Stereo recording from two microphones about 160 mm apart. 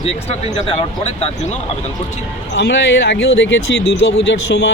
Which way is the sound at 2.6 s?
90° left.